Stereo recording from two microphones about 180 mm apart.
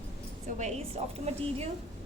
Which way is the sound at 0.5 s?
40° right (ahead or behind).